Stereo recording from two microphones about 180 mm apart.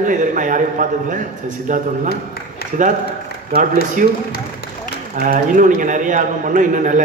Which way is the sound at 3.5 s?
45° right (ahead or behind).